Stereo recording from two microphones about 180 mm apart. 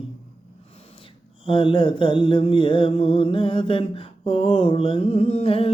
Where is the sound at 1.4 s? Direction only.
30° left (ahead or behind).